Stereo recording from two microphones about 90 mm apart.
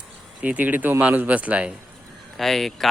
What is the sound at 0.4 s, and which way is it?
Speech, 20° right (ahead or behind).